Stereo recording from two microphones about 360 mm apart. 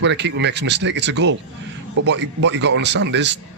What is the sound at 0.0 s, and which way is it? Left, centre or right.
A man's voice, right.